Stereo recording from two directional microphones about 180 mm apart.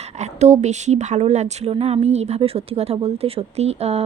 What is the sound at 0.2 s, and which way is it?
Speech, 40° right (ahead or behind).